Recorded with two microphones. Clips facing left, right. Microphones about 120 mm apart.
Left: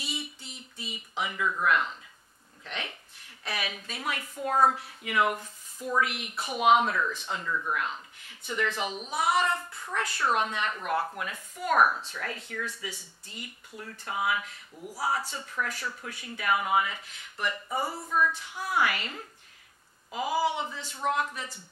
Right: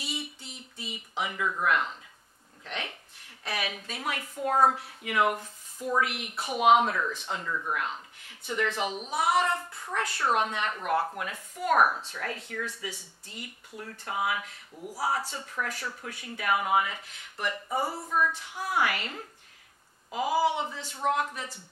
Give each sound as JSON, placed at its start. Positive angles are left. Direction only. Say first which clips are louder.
{"t": 0.0, "sound": "a sound", "louder": "right 1 dB", "side_deg": -55}
{"t": 3.4, "sound": "a woman's voice", "louder": "right 1 dB", "side_deg": -50}
{"t": 18.4, "sound": "speech", "louder": "even", "side_deg": -45}